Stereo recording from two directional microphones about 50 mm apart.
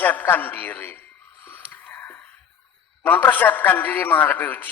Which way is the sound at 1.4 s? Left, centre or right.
Left.